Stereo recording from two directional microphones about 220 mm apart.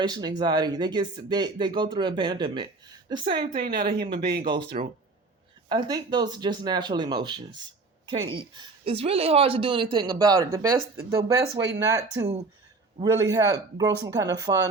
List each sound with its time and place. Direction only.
0.0 s speech: 20° right (ahead or behind)
3.5 s speech: 45° right (ahead or behind)
4.4 s speech: 20° right (ahead or behind)